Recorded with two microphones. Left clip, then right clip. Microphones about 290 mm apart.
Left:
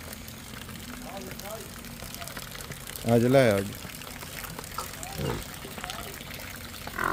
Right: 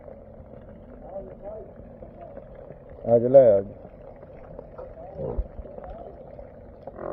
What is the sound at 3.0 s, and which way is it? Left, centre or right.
Speech, left.